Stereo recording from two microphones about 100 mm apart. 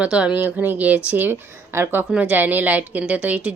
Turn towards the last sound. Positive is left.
turn(degrees=-15)  # may be behind; listen again after turning